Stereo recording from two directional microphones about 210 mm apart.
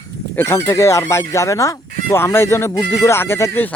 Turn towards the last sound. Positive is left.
turn(degrees=10)  # may be behind; listen again after turning